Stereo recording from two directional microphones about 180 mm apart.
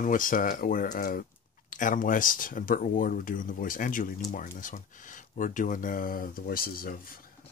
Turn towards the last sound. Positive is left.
turn(degrees=55)  # may be behind; listen again after turning